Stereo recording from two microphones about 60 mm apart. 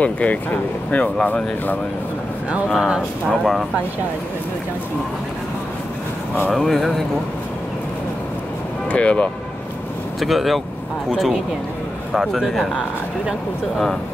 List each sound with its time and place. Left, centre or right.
0.0 s speech: left
2.7 s speech: centre
6.5 s speech: centre
8.9 s speech: left
10.2 s speech: centre